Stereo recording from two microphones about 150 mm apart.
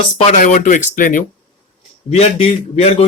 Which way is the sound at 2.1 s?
45° left (ahead or behind).